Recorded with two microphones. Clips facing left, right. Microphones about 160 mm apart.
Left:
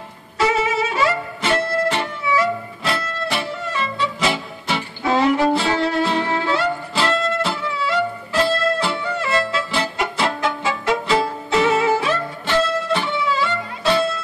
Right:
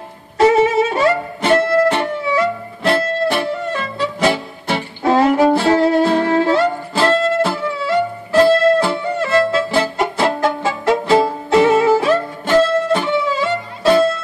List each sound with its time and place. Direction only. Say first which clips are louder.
0.4 s music: right 7 dB; 50° right (ahead or behind)
4.2 s music: right 5 dB; 50° right (ahead or behind)